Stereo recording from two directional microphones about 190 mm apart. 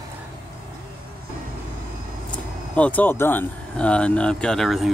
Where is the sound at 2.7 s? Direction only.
10° left (ahead or behind).